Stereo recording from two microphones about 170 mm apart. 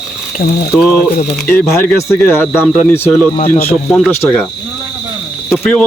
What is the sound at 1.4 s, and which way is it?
Speech, 15° left (ahead or behind).